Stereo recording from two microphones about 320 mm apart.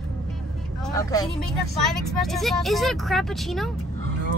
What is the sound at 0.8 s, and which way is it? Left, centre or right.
Speech, centre.